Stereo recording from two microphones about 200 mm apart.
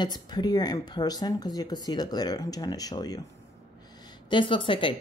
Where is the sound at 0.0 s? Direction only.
20° left (ahead or behind).